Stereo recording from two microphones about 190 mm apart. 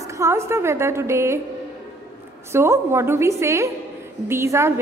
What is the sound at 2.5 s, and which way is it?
A woman's voice, 15° right (ahead or behind).